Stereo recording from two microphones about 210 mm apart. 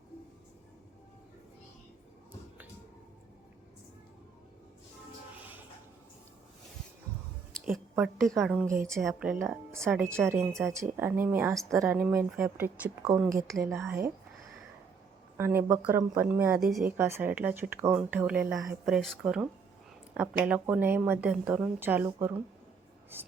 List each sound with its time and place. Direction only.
7.9 s a woman's voice: centre (ahead or behind)
9.9 s speech: 10° right (ahead or behind)
10.5 s a woman's voice: centre (ahead or behind)
10.8 s speech: 10° right (ahead or behind)
15.4 s speech: 10° right (ahead or behind)